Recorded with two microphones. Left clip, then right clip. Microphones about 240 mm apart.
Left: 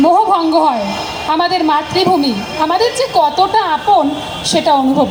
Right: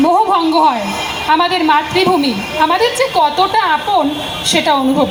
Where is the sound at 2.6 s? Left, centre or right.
Left.